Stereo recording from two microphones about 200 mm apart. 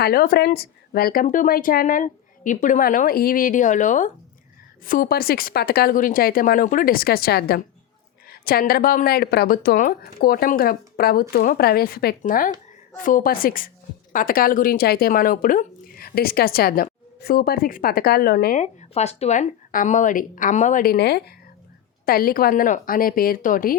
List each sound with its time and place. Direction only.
0.0 s speech: 50° left (ahead or behind)
18.6 s speech: 35° left (ahead or behind)